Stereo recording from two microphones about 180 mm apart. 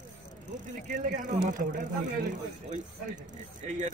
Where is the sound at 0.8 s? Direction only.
45° right (ahead or behind).